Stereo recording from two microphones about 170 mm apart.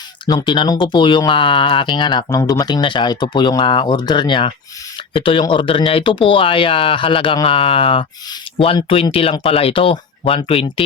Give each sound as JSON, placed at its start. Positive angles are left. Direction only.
{"t": 0.3, "sound": "speech", "side_deg": 25}